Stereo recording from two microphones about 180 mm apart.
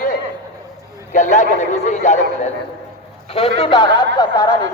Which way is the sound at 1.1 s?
45° left (ahead or behind).